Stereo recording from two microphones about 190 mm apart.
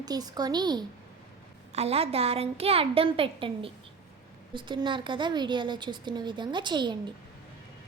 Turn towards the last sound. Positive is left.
turn(degrees=-25)  # may be behind; listen again after turning